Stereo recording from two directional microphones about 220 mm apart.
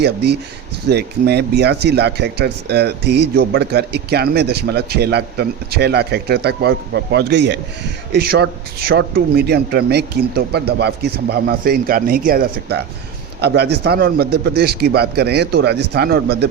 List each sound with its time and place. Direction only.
0.0 s speech: 50° right (ahead or behind)